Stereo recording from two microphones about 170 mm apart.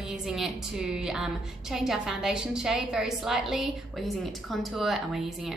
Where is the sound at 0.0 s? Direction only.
5° right (ahead or behind).